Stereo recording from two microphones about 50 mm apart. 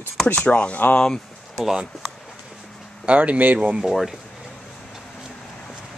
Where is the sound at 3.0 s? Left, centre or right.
Right.